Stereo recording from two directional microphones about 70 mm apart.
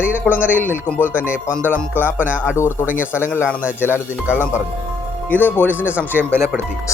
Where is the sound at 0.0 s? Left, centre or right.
Right.